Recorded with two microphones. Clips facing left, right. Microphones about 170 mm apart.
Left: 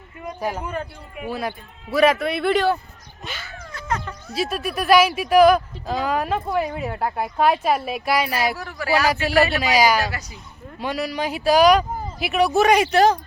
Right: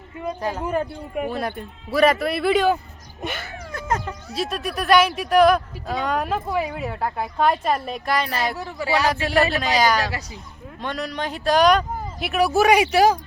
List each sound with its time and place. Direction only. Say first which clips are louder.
0.7 s speech: right 6 dB; 40° right (ahead or behind)
1.3 s speech: right 1 dB; centre (ahead or behind)
3.2 s a sound: right 5 dB; 50° right (ahead or behind)
4.3 s speech: left 2 dB; centre (ahead or behind)
8.5 s speech: right 2 dB; 20° right (ahead or behind)
8.9 s speech: left 1 dB; centre (ahead or behind)